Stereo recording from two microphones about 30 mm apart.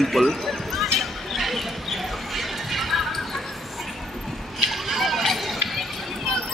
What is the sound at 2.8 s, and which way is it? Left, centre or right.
Horse, centre.